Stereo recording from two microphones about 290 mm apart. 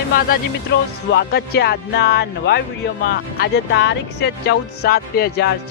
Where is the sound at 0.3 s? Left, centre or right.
Left.